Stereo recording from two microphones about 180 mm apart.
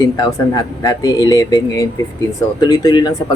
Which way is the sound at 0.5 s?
20° left (ahead or behind).